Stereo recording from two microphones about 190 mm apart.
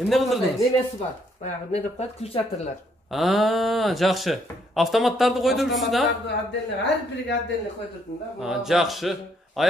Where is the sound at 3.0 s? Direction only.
Centre (ahead or behind).